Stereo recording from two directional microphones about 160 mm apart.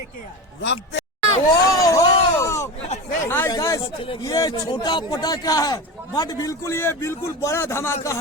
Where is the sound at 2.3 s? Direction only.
20° left (ahead or behind).